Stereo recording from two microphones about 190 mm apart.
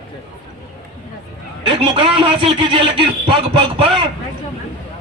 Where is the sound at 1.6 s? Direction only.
30° right (ahead or behind).